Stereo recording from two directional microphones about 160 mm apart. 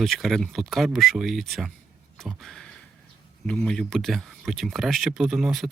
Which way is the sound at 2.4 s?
5° left (ahead or behind).